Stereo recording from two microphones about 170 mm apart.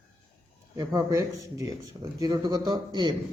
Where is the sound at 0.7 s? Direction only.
20° right (ahead or behind).